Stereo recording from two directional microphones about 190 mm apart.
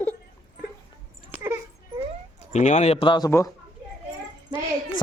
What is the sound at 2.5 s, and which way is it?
Speech, 35° left (ahead or behind).